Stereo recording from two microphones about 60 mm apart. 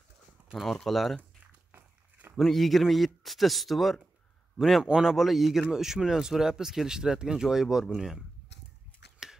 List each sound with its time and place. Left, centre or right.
0.6 s speech: centre
1.7 s a sound: right
2.3 s speech: centre